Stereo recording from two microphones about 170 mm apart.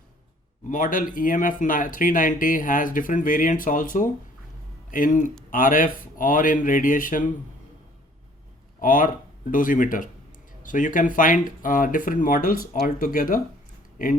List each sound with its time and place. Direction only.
0.7 s speech: 55° left (ahead or behind)
8.8 s speech: 50° left (ahead or behind)